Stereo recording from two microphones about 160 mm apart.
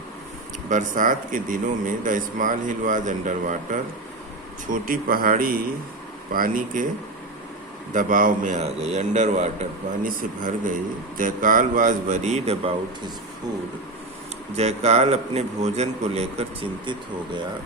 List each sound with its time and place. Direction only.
0.7 s a man's voice: 55° right (ahead or behind)
7.9 s a man's voice: 55° right (ahead or behind)
10.1 s a man's voice: 65° right (ahead or behind); by 13.1 s 35° right (ahead or behind)
14.5 s a man's voice: 45° right (ahead or behind)